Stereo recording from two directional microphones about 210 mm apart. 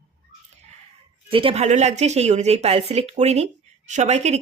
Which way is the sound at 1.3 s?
25° right (ahead or behind).